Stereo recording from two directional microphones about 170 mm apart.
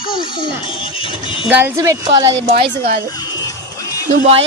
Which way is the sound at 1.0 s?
30° left (ahead or behind).